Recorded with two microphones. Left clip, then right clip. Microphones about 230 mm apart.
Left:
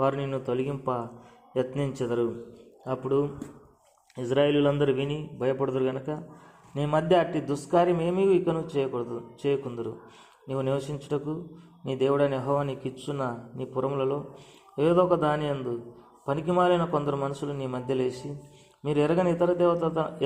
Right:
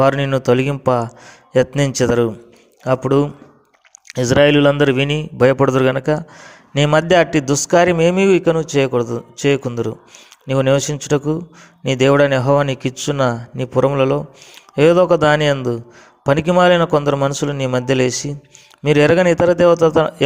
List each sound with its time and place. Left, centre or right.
0.0 s a man's voice: right